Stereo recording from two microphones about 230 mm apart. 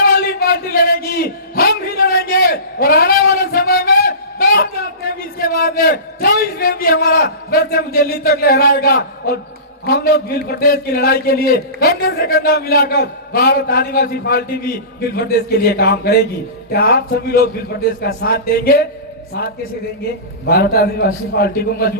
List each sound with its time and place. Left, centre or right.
0.0 s a sound: left
9.8 s a man's voice: left
20.5 s a man's voice: left